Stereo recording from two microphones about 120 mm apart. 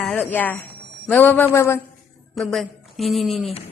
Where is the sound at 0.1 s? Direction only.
15° left (ahead or behind).